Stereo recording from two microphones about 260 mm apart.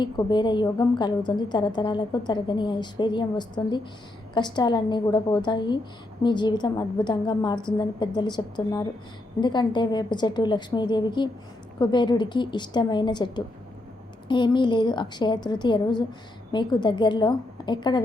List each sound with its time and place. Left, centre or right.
0.0 s a woman's voice: centre